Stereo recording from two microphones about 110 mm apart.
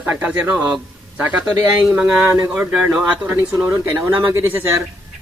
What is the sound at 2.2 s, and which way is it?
Speech, 25° right (ahead or behind).